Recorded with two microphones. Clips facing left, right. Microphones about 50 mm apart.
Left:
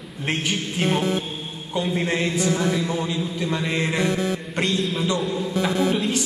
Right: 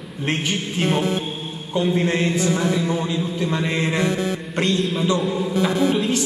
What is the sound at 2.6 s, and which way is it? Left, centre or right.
A man's voice, centre.